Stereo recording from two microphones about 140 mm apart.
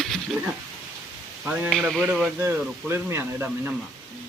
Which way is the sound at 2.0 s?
10° right (ahead or behind).